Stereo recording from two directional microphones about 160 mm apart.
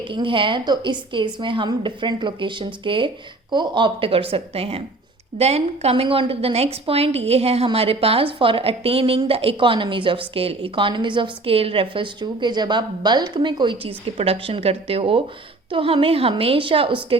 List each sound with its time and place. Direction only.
0.1 s a woman's voice: 30° right (ahead or behind)